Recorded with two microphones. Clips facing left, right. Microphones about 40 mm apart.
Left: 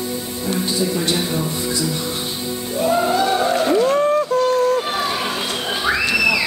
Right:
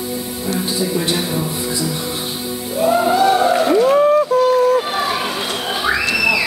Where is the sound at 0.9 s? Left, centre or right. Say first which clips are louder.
Right 1 dB; centre.